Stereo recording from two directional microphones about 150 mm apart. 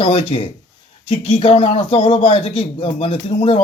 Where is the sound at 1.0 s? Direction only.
45° left (ahead or behind).